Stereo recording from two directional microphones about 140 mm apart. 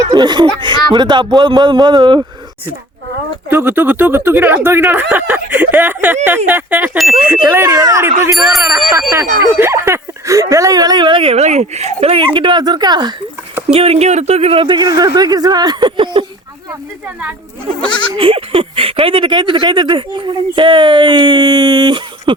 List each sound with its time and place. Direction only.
0.1 s speech: 30° right (ahead or behind)
3.5 s speech: 15° right (ahead or behind)
7.5 s speech: 25° right (ahead or behind)
8.4 s speech: centre (ahead or behind)
9.0 s speech: 20° right (ahead or behind)
13.7 s speech: 45° right (ahead or behind)
18.2 s speech: 40° right (ahead or behind)